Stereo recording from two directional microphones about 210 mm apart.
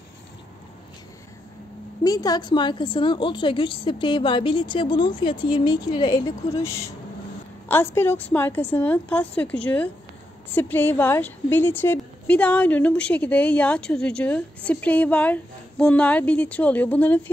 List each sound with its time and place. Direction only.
2.0 s a woman's voice: 15° left (ahead or behind)